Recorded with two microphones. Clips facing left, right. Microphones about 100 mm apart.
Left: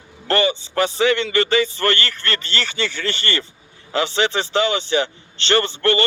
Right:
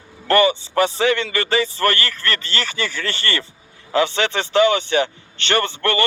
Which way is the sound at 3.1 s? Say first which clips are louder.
Even; 25° left (ahead or behind).